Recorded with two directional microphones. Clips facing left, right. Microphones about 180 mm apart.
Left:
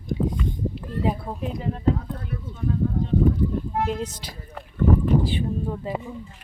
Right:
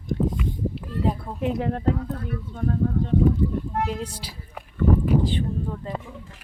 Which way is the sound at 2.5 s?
55° right (ahead or behind).